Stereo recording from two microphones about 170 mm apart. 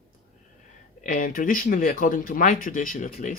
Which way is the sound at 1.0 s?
55° left (ahead or behind).